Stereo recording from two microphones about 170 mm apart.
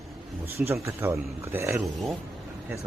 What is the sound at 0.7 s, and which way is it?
A man's voice, 15° right (ahead or behind).